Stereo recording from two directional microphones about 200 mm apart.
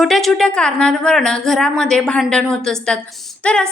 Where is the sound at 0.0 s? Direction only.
Centre (ahead or behind).